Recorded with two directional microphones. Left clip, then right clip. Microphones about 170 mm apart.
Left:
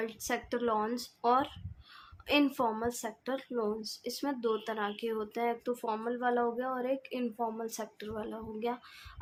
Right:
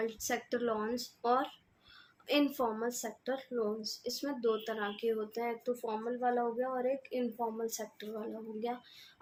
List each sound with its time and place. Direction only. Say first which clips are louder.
0.0 s speech: even; 30° left (ahead or behind)